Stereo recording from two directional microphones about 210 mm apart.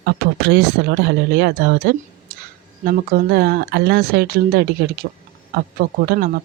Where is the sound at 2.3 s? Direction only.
45° right (ahead or behind).